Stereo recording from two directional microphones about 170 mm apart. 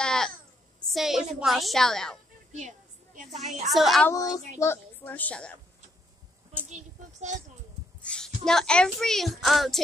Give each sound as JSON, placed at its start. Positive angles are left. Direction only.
{"t": 0.0, "sound": "a sound", "side_deg": 5}
{"t": 1.4, "sound": "a woman's voice", "side_deg": 0}
{"t": 3.3, "sound": "a woman's voice", "side_deg": 0}
{"t": 4.1, "sound": "a woman's voice", "side_deg": 20}
{"t": 6.7, "sound": "speech", "side_deg": -45}
{"t": 8.0, "sound": "speech", "side_deg": 5}